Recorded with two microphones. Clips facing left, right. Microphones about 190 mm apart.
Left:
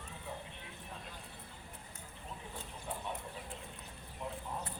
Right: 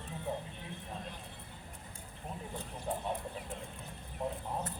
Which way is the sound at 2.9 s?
40° right (ahead or behind).